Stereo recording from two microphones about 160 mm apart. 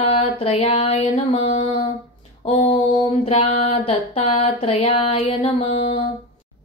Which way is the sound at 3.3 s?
40° left (ahead or behind).